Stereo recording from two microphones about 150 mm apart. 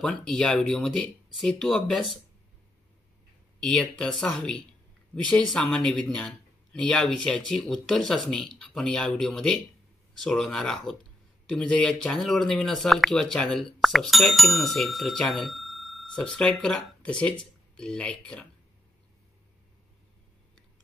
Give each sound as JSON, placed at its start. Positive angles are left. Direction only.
{"t": 0.0, "sound": "speech", "side_deg": 5}
{"t": 3.5, "sound": "speech", "side_deg": 5}